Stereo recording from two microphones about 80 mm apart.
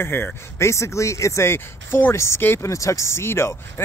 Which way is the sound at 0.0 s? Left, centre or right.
Left.